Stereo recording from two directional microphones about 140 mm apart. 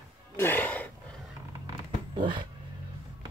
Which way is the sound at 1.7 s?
35° right (ahead or behind).